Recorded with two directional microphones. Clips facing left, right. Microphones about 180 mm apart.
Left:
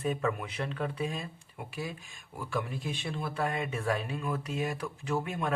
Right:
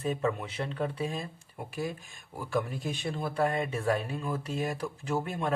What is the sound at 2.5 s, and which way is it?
Speech, 40° right (ahead or behind).